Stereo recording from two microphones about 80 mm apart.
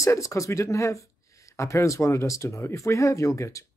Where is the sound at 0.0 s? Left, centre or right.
Left.